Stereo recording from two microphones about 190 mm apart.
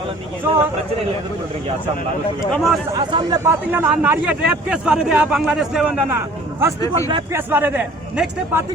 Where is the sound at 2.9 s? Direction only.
20° right (ahead or behind).